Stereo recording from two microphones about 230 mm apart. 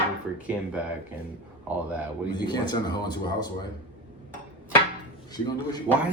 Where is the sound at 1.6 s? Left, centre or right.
Centre.